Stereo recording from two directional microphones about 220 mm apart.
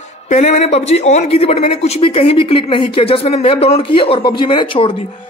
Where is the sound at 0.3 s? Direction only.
30° left (ahead or behind).